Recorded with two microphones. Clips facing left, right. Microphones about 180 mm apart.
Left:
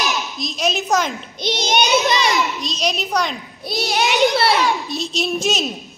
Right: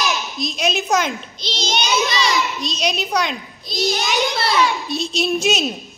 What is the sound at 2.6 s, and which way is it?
Speech, centre (ahead or behind).